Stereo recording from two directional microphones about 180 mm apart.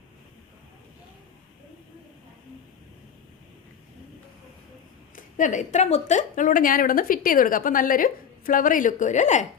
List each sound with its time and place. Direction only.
5.4 s a woman's voice: 45° left (ahead or behind)